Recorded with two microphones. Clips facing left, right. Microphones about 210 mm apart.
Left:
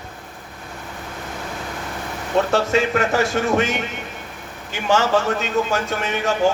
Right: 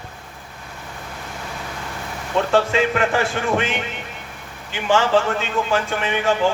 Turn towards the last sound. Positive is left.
turn(degrees=40)  # may be behind; listen again after turning